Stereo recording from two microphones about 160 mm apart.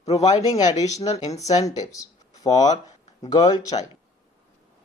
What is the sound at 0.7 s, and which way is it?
Speech, 45° left (ahead or behind).